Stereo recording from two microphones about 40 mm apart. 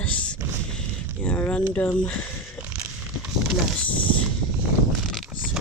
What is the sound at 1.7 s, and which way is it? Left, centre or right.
Speech, left.